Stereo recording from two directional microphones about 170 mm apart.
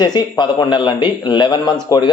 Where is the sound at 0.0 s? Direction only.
25° left (ahead or behind).